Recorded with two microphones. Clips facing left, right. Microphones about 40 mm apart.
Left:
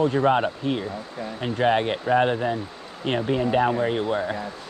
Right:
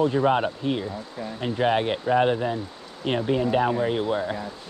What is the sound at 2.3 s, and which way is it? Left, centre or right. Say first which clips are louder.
Speech: left 1 dB; left.